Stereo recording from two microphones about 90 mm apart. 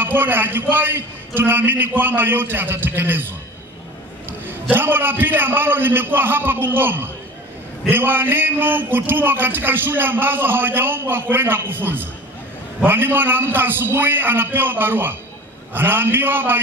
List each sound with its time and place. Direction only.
0.0 s speech: 25° right (ahead or behind)